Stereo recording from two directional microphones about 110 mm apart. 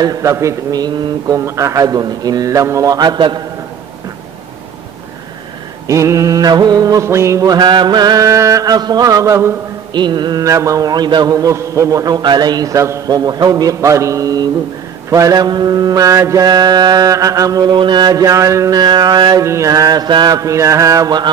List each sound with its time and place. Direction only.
0.0 s a man's voice: 30° right (ahead or behind)
5.9 s a man's voice: 30° right (ahead or behind)
9.9 s a man's voice: 40° right (ahead or behind)
10.4 s a man's voice: 30° right (ahead or behind)
17.7 s a man's voice: 45° right (ahead or behind)
19.4 s a man's voice: 25° right (ahead or behind)